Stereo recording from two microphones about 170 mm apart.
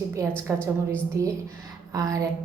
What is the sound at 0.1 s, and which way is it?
A woman's voice, 15° right (ahead or behind).